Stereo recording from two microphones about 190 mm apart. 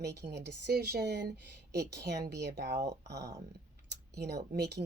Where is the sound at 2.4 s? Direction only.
60° right (ahead or behind).